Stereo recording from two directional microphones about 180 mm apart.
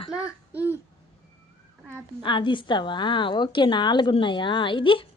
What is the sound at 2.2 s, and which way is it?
A woman's voice, 25° left (ahead or behind).